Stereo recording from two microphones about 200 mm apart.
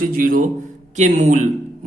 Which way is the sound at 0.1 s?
45° right (ahead or behind).